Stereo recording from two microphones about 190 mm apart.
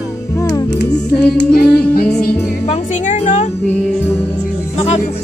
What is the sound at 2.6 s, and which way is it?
Music, 35° left (ahead or behind).